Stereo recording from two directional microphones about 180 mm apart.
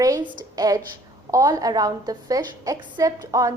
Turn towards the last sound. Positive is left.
turn(degrees=-20)  # may be behind; listen again after turning